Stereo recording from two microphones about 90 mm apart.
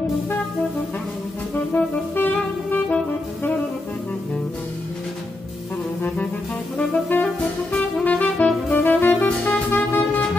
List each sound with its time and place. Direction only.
1.7 s music: 20° left (ahead or behind)
6.8 s saxophone: 20° left (ahead or behind)
7.7 s music: 15° left (ahead or behind)